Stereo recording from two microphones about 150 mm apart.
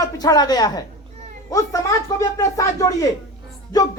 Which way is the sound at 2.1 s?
20° left (ahead or behind).